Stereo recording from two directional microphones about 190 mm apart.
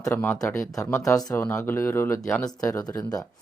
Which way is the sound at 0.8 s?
15° left (ahead or behind).